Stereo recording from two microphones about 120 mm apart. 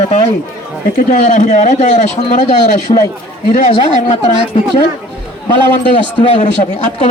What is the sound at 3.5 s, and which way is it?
Speech, 90° left.